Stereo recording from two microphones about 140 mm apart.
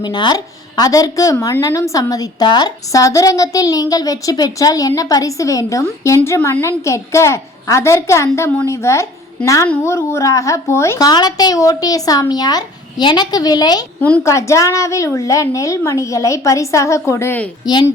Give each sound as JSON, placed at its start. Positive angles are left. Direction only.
{"t": 0.0, "sound": "a woman's voice", "side_deg": 30}
{"t": 14.0, "sound": "a woman's voice", "side_deg": 15}